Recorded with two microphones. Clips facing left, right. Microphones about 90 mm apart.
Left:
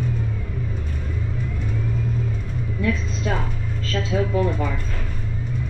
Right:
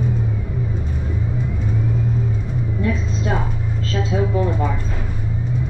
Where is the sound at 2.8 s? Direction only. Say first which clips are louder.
Even; 20° right (ahead or behind).